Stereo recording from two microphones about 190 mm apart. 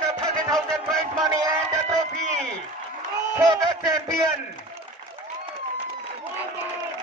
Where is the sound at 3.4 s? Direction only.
20° right (ahead or behind).